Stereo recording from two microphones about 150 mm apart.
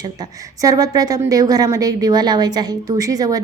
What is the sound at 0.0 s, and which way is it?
A woman's voice, 25° right (ahead or behind).